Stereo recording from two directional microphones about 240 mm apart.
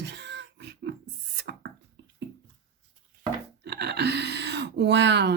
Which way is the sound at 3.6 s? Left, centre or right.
Right.